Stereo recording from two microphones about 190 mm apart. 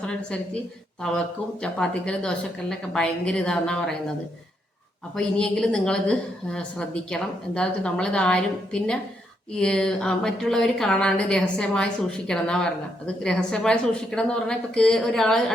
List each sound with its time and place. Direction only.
0.0 s a woman's voice: 5° left (ahead or behind)
1.6 s a woman's voice: 5° left (ahead or behind)
5.1 s a woman's voice: 5° left (ahead or behind)